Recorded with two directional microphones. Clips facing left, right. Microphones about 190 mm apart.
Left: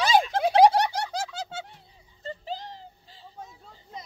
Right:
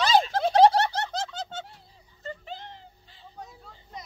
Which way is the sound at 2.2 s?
35° left (ahead or behind).